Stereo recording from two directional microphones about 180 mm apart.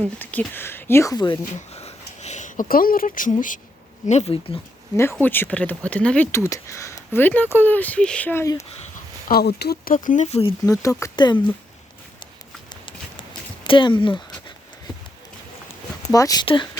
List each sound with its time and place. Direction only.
0.0 s speech: 10° left (ahead or behind)
1.5 s speech: 35° left (ahead or behind)
4.0 s speech: 40° left (ahead or behind)
5.1 s speech: 10° left (ahead or behind)
9.3 s speech: 65° left (ahead or behind); by 10.5 s 35° left (ahead or behind)
10.7 s speech: 20° left (ahead or behind)
13.7 s speech: 25° left (ahead or behind)
16.1 s speech: 20° left (ahead or behind)